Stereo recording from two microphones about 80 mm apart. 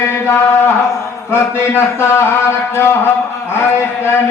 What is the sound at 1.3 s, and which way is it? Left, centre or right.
A man's voice, left.